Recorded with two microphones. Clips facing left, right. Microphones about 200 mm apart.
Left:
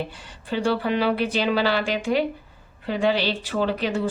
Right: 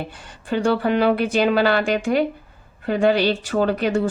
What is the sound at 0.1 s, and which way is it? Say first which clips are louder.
Speech: right 4 dB; 50° right (ahead or behind).